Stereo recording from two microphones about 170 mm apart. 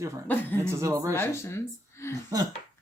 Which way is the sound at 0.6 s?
15° right (ahead or behind).